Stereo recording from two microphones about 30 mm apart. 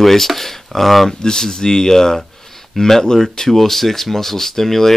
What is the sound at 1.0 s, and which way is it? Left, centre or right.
Speech, centre.